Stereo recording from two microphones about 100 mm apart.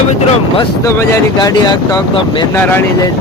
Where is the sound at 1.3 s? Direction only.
40° left (ahead or behind).